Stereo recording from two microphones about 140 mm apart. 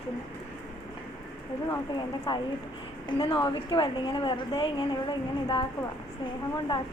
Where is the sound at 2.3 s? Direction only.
35° left (ahead or behind).